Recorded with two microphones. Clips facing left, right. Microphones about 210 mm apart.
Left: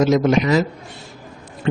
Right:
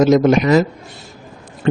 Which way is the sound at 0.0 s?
50° right (ahead or behind).